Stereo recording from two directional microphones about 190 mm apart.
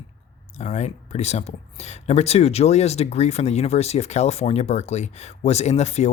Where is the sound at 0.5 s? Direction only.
35° left (ahead or behind).